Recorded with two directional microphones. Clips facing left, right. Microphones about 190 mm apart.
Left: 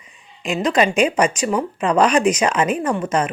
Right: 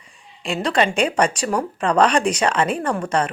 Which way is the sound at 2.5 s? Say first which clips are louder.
Left 1 dB; 30° right (ahead or behind).